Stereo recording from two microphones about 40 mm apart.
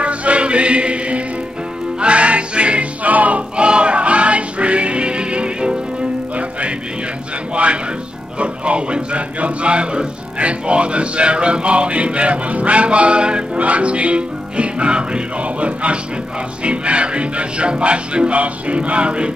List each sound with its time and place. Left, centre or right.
0.0 s music: right
7.5 s music: right
8.4 s speech: right
16.6 s music: right